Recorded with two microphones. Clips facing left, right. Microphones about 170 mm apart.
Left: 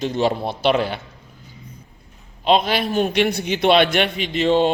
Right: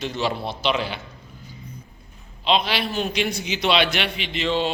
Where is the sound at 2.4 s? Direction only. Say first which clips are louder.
Left 4 dB; 45° left (ahead or behind).